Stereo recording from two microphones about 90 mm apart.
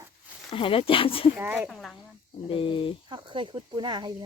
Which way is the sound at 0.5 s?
80° left.